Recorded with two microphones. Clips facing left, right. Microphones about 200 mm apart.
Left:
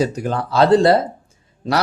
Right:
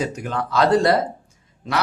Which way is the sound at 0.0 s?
35° left (ahead or behind).